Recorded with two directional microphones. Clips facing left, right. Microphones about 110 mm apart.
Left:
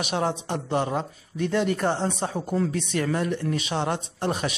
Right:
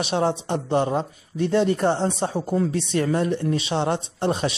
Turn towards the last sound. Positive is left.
turn(degrees=-25)  # may be behind; listen again after turning